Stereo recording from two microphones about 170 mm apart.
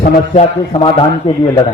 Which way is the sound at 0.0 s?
35° left (ahead or behind).